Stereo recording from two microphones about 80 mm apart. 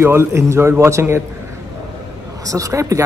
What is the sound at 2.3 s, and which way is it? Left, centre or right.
Speech, right.